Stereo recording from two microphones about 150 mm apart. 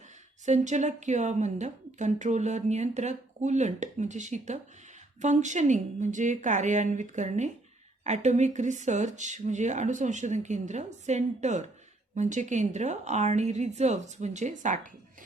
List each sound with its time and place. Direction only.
0.4 s a woman's voice: 50° right (ahead or behind)